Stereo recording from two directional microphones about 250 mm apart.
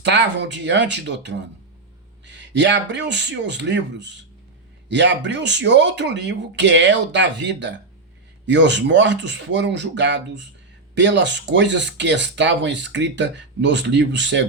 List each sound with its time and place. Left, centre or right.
0.0 s speech: right